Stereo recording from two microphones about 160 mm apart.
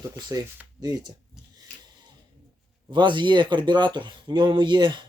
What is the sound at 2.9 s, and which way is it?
Speech, 30° right (ahead or behind).